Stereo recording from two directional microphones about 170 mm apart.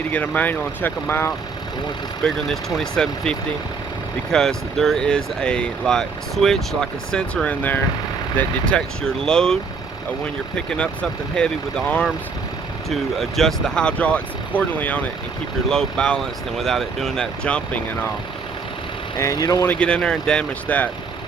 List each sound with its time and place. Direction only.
0.1 s speech: 10° left (ahead or behind)
2.2 s speech: centre (ahead or behind)
10.7 s speech: 5° left (ahead or behind)
19.1 s speech: 20° left (ahead or behind)
19.7 s speech: 5° left (ahead or behind)